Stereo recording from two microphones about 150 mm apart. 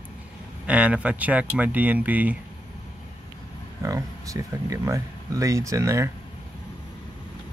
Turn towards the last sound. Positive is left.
turn(degrees=-20)  # may be behind; listen again after turning